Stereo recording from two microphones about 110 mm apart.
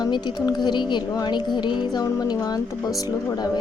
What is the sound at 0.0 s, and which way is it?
Speech, 40° left (ahead or behind).